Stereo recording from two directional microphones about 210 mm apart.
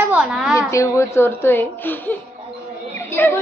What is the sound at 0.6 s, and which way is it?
A woman's voice, 15° left (ahead or behind).